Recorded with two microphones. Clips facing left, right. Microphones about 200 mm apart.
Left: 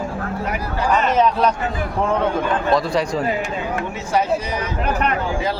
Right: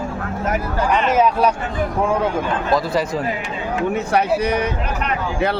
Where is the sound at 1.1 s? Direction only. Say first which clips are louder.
Right 1 dB; 10° right (ahead or behind).